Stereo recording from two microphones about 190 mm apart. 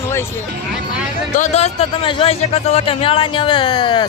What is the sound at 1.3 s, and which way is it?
Speech, 35° left (ahead or behind).